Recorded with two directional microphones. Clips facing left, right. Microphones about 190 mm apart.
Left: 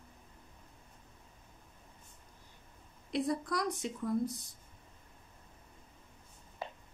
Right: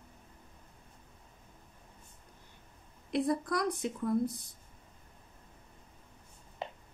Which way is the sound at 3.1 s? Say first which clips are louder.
Right 3 dB; 55° right (ahead or behind).